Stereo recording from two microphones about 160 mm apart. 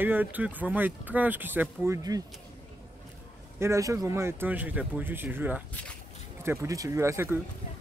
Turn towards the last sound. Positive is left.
turn(degrees=-15)  # may be behind; listen again after turning